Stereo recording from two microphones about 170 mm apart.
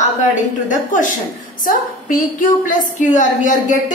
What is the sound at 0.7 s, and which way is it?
A woman's voice, 50° left (ahead or behind).